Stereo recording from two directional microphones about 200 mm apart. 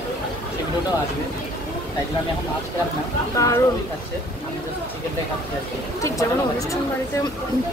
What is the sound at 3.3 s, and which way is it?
Speech, 15° left (ahead or behind).